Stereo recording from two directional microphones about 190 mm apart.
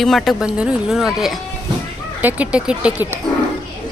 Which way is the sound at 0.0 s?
Centre (ahead or behind).